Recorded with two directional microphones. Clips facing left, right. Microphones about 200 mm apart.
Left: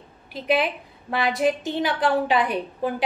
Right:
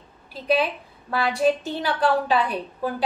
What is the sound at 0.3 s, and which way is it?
A woman's voice, 20° left (ahead or behind).